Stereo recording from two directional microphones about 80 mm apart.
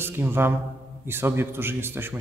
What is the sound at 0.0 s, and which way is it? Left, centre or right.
A man's voice, right.